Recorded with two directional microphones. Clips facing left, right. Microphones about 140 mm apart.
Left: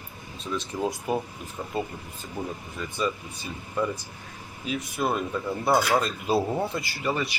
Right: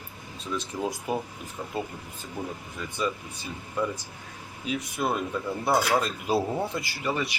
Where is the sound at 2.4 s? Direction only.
Centre (ahead or behind).